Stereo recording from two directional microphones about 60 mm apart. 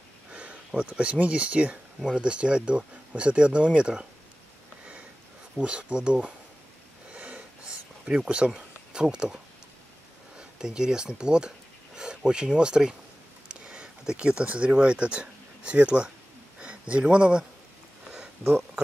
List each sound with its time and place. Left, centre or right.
0.3 s a sound: right
0.8 s speech: right
5.6 s speech: centre
7.1 s sniff: right
10.6 s speech: centre
18.1 s a sound: centre